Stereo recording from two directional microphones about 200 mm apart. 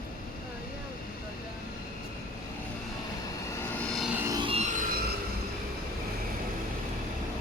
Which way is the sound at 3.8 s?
Centre (ahead or behind).